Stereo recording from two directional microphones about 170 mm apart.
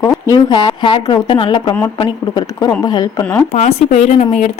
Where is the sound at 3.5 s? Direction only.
40° left (ahead or behind).